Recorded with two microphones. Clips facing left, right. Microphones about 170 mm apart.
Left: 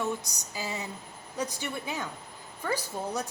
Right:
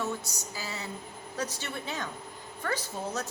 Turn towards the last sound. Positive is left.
turn(degrees=10)  # may be behind; listen again after turning